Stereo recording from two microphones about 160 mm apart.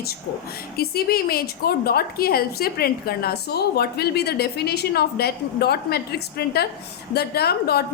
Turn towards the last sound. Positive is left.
turn(degrees=80)